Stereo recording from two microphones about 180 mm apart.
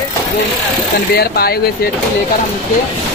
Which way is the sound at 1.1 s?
60° left (ahead or behind).